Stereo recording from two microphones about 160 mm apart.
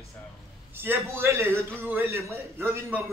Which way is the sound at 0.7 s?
15° right (ahead or behind).